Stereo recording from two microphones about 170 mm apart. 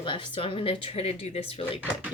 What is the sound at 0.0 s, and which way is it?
Speech, 30° left (ahead or behind).